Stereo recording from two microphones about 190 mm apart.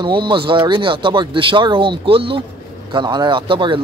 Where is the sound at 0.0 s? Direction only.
25° right (ahead or behind).